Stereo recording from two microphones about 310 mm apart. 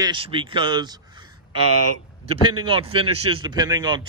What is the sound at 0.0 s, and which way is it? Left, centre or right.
Speech, centre.